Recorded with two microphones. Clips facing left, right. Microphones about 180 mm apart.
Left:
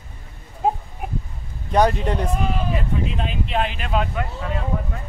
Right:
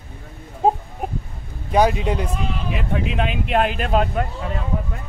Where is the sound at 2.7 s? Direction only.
70° right (ahead or behind); by 4.2 s 45° right (ahead or behind).